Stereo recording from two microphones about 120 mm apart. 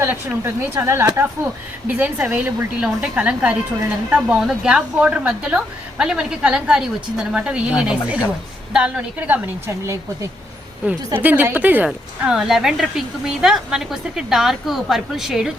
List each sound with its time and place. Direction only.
0.0 s a woman's voice: 20° right (ahead or behind); by 15.5 s 5° right (ahead or behind)